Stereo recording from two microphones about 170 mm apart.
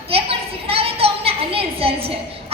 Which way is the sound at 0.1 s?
35° right (ahead or behind).